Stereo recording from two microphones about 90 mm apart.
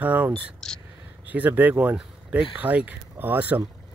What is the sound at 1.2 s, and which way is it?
Speech, 20° right (ahead or behind).